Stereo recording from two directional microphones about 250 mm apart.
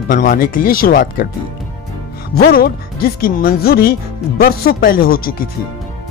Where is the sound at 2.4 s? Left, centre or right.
Left.